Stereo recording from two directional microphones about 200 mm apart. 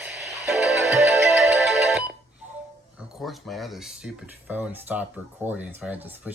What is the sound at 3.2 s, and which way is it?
Speech, centre (ahead or behind).